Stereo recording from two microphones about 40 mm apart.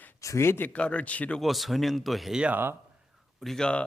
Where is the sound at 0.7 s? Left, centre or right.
Left.